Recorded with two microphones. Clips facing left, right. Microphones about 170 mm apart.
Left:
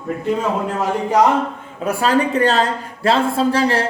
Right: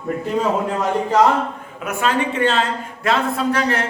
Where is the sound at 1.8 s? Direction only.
35° left (ahead or behind).